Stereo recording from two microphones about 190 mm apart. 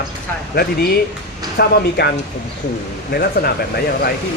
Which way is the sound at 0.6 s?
55° left (ahead or behind).